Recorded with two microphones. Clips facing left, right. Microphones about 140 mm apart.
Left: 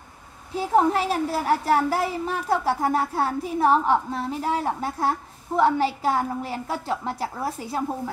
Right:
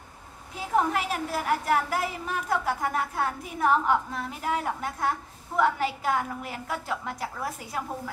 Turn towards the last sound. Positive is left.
turn(degrees=30)  # may be behind; listen again after turning